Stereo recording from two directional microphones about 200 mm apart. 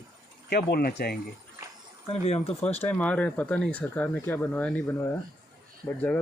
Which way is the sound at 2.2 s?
30° left (ahead or behind).